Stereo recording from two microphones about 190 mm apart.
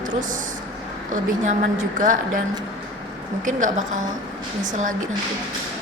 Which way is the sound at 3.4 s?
40° right (ahead or behind).